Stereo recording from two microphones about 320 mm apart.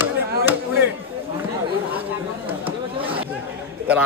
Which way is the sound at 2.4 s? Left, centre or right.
Centre.